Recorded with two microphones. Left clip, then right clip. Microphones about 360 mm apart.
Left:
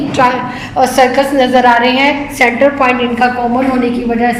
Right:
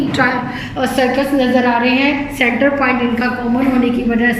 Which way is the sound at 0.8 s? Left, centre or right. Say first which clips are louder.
Left 6 dB; centre.